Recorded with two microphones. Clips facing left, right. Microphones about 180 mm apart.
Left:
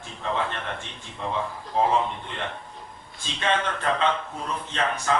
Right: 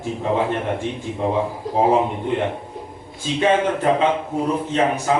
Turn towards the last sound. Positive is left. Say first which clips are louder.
# right 7 dB
turn(degrees=-15)  # may be behind; listen again after turning